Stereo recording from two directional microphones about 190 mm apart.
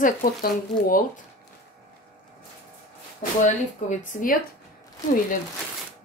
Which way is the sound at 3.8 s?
40° left (ahead or behind).